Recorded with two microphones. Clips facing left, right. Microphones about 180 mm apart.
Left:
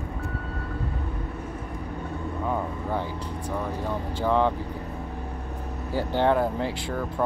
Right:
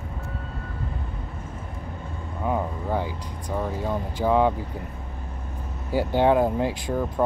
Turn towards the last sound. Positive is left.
turn(degrees=-15)  # may be behind; listen again after turning